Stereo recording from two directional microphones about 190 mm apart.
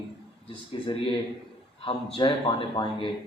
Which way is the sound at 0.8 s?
25° left (ahead or behind).